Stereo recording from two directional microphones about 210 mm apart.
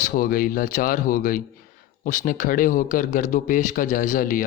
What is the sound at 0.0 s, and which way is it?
A man's voice, 40° left (ahead or behind).